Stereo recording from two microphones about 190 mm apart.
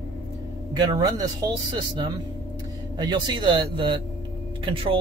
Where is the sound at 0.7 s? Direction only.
20° right (ahead or behind).